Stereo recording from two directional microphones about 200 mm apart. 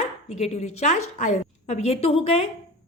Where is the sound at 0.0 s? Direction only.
35° left (ahead or behind).